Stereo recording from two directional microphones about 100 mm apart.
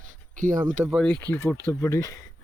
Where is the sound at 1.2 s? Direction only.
20° left (ahead or behind).